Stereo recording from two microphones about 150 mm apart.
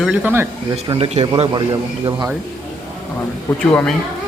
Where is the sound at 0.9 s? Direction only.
45° right (ahead or behind).